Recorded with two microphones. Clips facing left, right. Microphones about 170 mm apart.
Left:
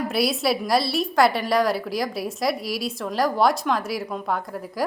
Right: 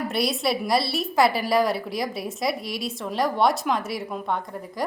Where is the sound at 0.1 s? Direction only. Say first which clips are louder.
Left 2 dB; centre (ahead or behind).